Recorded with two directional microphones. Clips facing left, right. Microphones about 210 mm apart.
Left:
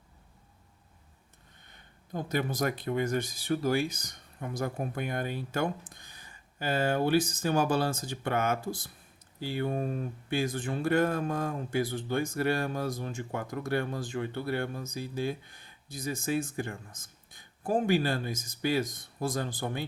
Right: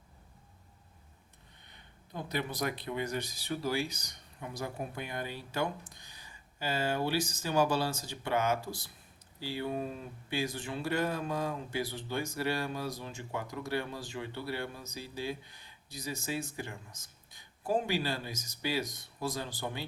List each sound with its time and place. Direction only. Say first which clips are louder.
1.7 s speech: left 6 dB; 45° left (ahead or behind)